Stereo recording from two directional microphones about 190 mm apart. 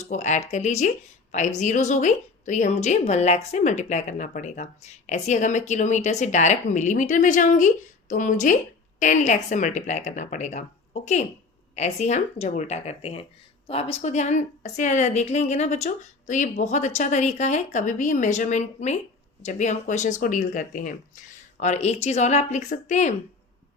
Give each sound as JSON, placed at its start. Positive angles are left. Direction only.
{"t": 0.1, "sound": "a woman's voice", "side_deg": 40}